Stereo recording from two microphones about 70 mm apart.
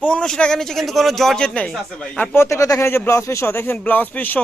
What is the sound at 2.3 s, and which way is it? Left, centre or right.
Speech, left.